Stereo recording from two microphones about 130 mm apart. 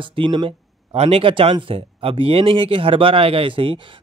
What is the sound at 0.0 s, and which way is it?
Speech, 40° right (ahead or behind).